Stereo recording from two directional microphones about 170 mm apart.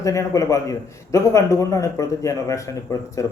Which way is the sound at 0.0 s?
20° left (ahead or behind).